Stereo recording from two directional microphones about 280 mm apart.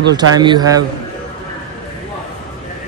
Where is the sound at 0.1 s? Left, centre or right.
Centre.